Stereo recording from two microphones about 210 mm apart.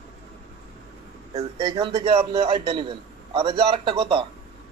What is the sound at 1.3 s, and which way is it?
Speech, 25° right (ahead or behind).